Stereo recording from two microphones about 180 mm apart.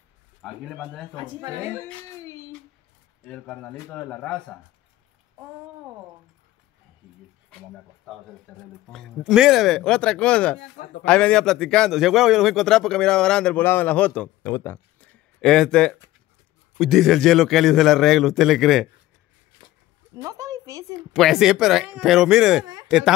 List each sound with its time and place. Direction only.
0.4 s a man's voice: centre (ahead or behind)
1.1 s speech: 20° right (ahead or behind)
1.8 s speech: 15° left (ahead or behind)
3.2 s a man's voice: 5° left (ahead or behind)
8.1 s a man's voice: centre (ahead or behind)
8.5 s a man's voice: 10° left (ahead or behind)
20.2 s speech: 20° right (ahead or behind)
21.1 s a man's voice: centre (ahead or behind)